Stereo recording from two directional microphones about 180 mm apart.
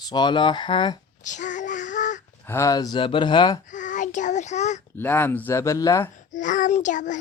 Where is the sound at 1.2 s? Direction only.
45° left (ahead or behind).